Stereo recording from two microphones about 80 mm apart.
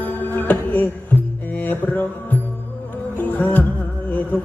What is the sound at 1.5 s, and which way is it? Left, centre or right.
Music, left.